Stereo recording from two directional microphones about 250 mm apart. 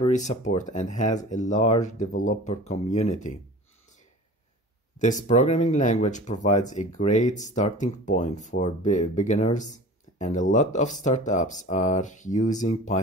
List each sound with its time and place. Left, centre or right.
0.0 s speech: left
4.9 s speech: left